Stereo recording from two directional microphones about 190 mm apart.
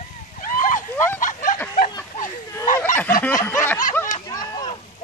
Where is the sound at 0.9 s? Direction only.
10° left (ahead or behind).